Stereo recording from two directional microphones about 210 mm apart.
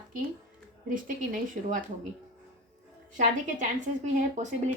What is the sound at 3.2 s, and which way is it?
Speech, 35° right (ahead or behind).